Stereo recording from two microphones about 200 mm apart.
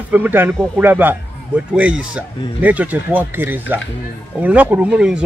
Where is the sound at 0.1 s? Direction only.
10° right (ahead or behind).